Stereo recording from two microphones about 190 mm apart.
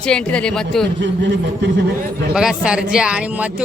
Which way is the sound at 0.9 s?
70° right (ahead or behind).